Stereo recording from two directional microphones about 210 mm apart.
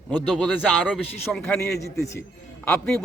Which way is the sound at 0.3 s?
Centre (ahead or behind).